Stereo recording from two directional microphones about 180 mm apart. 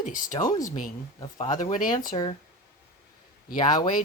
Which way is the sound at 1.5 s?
45° left (ahead or behind).